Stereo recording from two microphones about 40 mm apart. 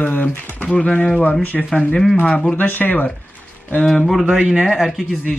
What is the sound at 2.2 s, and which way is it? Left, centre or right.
Speech, left.